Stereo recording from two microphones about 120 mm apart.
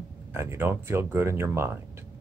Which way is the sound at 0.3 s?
20° right (ahead or behind).